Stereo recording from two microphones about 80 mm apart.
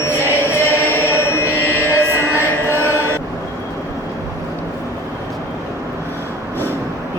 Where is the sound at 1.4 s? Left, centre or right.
Left.